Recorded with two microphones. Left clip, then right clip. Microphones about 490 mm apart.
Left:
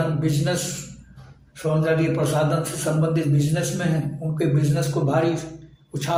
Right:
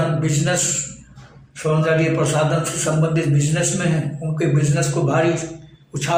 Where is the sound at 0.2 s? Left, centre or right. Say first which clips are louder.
Right 4 dB; left.